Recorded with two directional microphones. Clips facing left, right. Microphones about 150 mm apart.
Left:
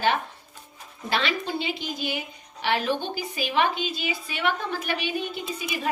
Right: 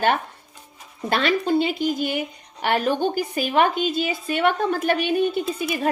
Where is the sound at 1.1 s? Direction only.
50° right (ahead or behind).